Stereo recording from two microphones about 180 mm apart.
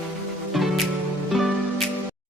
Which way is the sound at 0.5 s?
Centre (ahead or behind).